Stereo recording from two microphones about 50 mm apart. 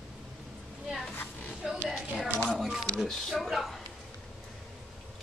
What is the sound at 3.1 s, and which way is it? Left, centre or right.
Speech, centre.